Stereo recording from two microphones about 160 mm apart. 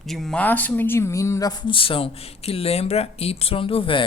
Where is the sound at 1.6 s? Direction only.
35° left (ahead or behind).